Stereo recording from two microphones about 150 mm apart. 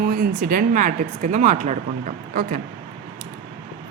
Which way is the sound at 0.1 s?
75° right (ahead or behind).